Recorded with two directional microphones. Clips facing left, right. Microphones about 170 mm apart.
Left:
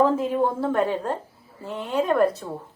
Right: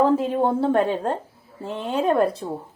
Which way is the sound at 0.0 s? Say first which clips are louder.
Right 1 dB; 30° right (ahead or behind).